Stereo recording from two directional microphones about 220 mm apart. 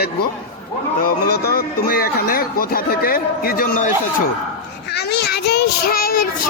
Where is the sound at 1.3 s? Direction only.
45° left (ahead or behind).